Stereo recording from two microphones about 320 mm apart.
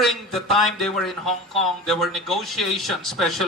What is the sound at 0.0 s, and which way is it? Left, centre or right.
Speech, centre.